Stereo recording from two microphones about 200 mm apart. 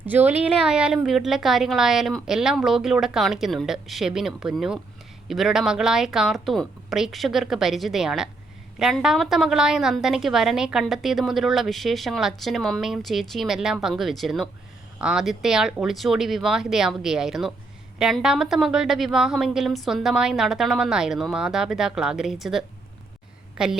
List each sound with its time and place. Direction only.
0.0 s a woman's voice: 10° right (ahead or behind)